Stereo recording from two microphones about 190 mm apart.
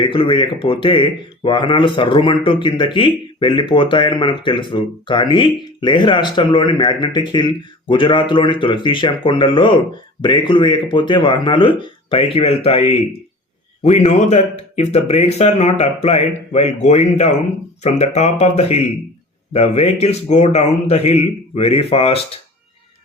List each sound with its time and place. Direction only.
0.0 s a man's voice: 25° left (ahead or behind)